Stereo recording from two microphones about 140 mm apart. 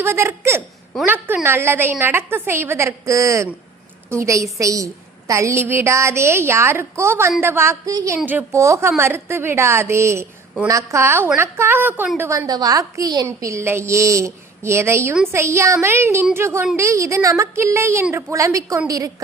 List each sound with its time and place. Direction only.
0.0 s a woman's voice: 20° right (ahead or behind)
8.2 s a woman's voice: 15° right (ahead or behind)
12.5 s a woman's voice: 25° right (ahead or behind)